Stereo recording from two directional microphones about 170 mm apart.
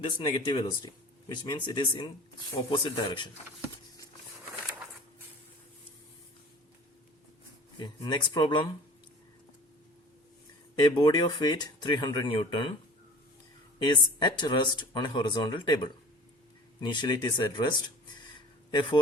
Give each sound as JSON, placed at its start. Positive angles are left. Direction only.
{"t": 0.0, "sound": "speech", "side_deg": 30}
{"t": 7.8, "sound": "speech", "side_deg": 25}
{"t": 10.8, "sound": "speech", "side_deg": 25}
{"t": 13.8, "sound": "speech", "side_deg": 25}
{"t": 18.3, "sound": "a sound", "side_deg": 25}